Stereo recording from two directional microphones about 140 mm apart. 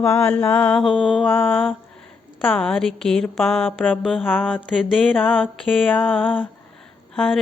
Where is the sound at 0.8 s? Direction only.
Centre (ahead or behind).